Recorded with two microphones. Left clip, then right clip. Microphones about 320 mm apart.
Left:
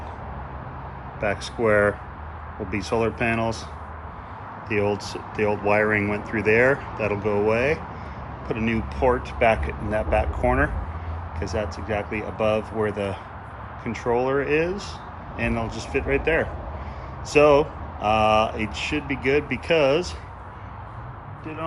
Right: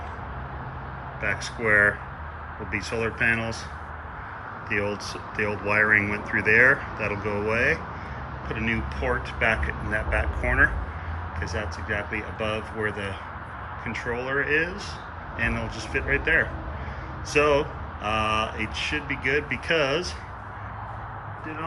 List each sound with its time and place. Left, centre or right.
1.2 s speech: centre
4.7 s speech: centre